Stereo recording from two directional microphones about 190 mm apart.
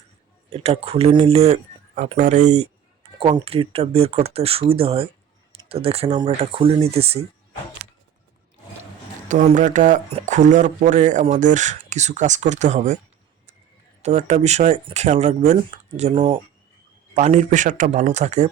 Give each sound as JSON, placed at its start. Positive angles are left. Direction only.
{"t": 0.5, "sound": "speech", "side_deg": -30}
{"t": 2.0, "sound": "speech", "side_deg": -40}
{"t": 3.2, "sound": "speech", "side_deg": -25}
{"t": 9.3, "sound": "speech", "side_deg": -40}
{"t": 14.0, "sound": "speech", "side_deg": -35}